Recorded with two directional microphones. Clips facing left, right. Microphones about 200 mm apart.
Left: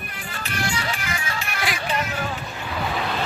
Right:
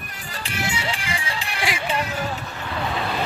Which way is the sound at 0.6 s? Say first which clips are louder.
Even; 25° right (ahead or behind).